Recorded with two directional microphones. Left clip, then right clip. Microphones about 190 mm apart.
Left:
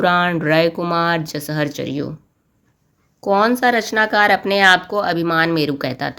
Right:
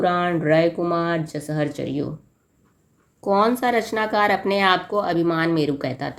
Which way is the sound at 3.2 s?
20° left (ahead or behind).